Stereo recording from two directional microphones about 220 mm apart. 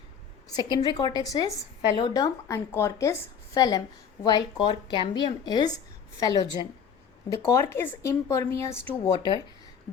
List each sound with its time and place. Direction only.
0.4 s a woman's voice: 20° left (ahead or behind)